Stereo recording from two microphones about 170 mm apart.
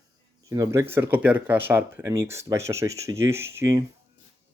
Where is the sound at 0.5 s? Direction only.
20° right (ahead or behind).